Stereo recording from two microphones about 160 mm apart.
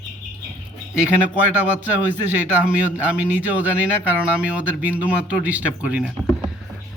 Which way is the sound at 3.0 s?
10° right (ahead or behind).